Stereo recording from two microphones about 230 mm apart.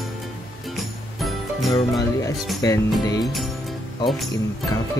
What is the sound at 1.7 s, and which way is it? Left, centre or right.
Music, centre.